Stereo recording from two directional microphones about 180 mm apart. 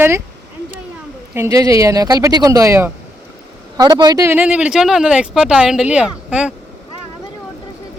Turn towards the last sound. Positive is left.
turn(degrees=-5)  # may be behind; listen again after turning